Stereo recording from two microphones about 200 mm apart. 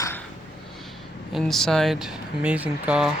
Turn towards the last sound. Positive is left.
turn(degrees=-5)  # may be behind; listen again after turning